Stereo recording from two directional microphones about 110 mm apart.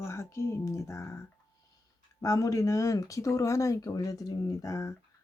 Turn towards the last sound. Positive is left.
turn(degrees=30)  # may be behind; listen again after turning